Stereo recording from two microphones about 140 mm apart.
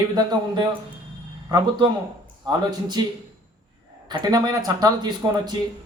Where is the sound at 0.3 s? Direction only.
30° right (ahead or behind).